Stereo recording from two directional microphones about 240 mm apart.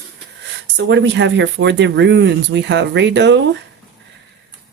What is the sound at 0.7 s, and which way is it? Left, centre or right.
Speech, right.